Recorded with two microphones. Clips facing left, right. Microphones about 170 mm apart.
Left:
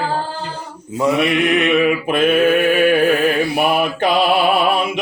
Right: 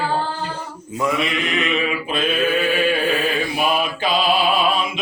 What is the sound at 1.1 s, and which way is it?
Mantra, 70° left (ahead or behind).